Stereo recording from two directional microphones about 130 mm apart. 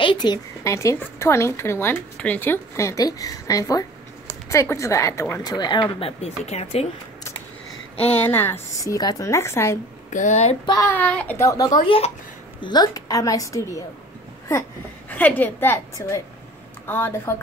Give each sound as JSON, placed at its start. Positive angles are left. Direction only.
{"t": 0.0, "sound": "a sound", "side_deg": 35}
{"t": 0.7, "sound": "speech", "side_deg": 25}
{"t": 8.2, "sound": "speech", "side_deg": 15}
{"t": 10.1, "sound": "a sound", "side_deg": 65}
{"t": 10.9, "sound": "a woman's voice", "side_deg": 10}
{"t": 11.3, "sound": "a woman's voice", "side_deg": 25}
{"t": 15.0, "sound": "a woman's voice", "side_deg": 15}